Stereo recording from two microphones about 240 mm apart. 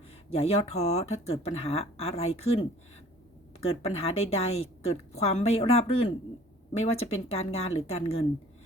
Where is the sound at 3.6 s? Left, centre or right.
Left.